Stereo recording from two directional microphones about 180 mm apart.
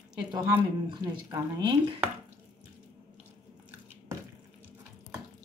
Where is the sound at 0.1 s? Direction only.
20° right (ahead or behind).